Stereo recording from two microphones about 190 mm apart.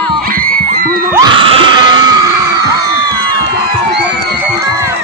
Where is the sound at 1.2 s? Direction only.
25° right (ahead or behind).